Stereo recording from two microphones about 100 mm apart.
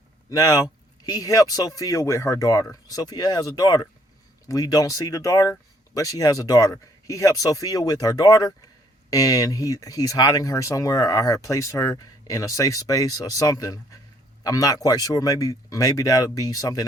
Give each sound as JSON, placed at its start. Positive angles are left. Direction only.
{"t": 0.3, "sound": "speech", "side_deg": 35}